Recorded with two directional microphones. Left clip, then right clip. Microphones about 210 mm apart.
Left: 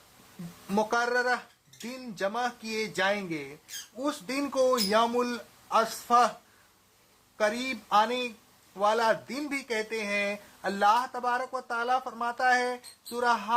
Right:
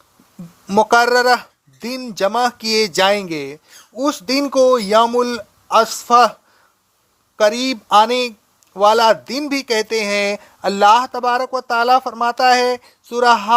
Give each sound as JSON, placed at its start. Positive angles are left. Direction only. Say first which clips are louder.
{"t": 0.7, "sound": "speech", "louder": "right 15 dB", "side_deg": -50}
{"t": 7.3, "sound": "speech", "louder": "right 13 dB", "side_deg": -45}